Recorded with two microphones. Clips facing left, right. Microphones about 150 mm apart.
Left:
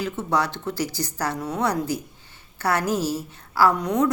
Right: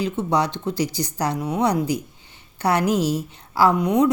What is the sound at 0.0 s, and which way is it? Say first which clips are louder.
Speech: right 3 dB; 15° right (ahead or behind).